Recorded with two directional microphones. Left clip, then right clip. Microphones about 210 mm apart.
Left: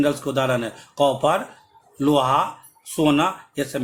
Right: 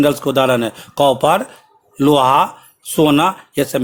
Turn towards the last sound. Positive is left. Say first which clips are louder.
# right 8 dB
turn(degrees=-45)  # may be behind; listen again after turning